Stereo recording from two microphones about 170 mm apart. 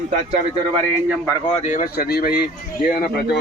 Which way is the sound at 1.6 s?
55° left (ahead or behind).